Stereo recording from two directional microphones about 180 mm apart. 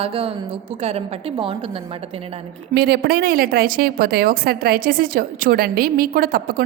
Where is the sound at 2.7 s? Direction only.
60° right (ahead or behind).